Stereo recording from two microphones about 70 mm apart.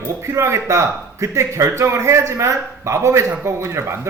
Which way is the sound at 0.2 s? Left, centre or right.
Right.